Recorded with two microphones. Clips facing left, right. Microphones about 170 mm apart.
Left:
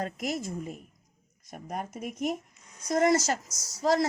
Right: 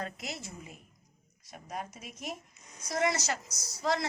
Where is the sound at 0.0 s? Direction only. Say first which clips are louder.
Left 8 dB; 45° left (ahead or behind).